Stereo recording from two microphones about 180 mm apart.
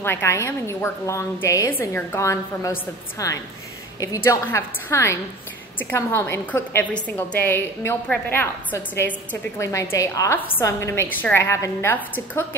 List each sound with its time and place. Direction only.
0.0 s a woman's voice: 10° left (ahead or behind)